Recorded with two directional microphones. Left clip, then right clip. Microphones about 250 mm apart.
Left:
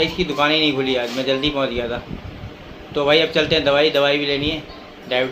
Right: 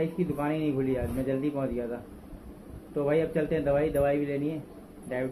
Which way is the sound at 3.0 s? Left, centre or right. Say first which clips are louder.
Left 11 dB; centre.